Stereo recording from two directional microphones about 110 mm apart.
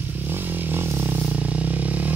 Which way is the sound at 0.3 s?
20° right (ahead or behind).